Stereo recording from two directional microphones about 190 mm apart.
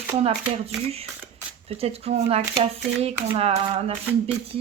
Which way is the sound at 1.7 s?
30° right (ahead or behind).